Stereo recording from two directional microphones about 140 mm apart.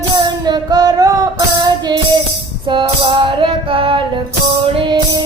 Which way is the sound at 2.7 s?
35° right (ahead or behind).